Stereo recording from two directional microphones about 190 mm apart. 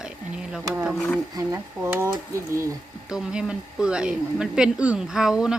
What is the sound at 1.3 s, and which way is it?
Speech, 15° right (ahead or behind).